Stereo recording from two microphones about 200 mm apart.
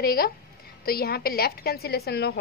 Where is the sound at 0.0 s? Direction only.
50° left (ahead or behind).